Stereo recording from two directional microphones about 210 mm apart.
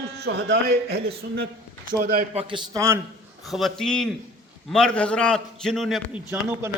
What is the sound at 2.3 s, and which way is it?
Speech, 25° right (ahead or behind).